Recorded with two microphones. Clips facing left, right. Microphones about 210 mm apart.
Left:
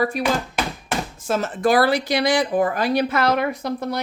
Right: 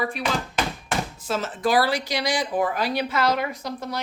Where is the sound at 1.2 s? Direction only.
50° left (ahead or behind).